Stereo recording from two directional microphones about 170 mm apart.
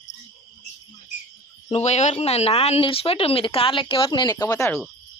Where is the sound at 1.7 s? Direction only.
40° left (ahead or behind); by 4.8 s 15° left (ahead or behind).